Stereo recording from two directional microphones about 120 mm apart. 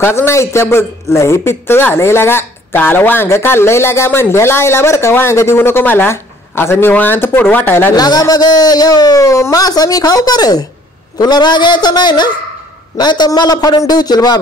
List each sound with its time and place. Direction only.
0.0 s a woman's voice: 20° left (ahead or behind)
7.9 s a man's voice: 35° left (ahead or behind)